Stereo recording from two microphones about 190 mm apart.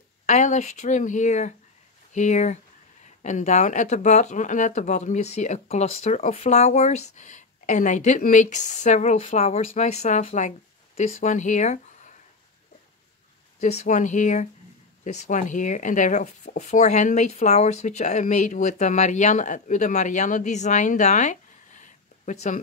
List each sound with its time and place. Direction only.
0.3 s speech: 40° left (ahead or behind)
13.6 s speech: 40° left (ahead or behind)